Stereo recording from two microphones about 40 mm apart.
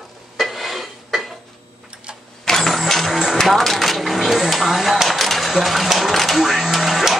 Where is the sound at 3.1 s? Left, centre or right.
Centre.